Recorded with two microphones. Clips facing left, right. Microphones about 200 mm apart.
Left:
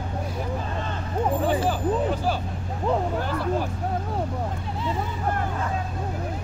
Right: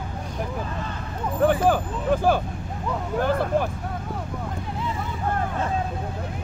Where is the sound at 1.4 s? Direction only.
55° right (ahead or behind).